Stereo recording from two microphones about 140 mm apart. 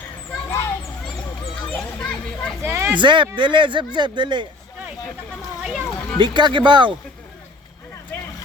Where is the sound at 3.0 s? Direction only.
35° right (ahead or behind).